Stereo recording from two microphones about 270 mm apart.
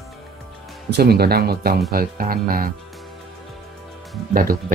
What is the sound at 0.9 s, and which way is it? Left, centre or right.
Speech, right.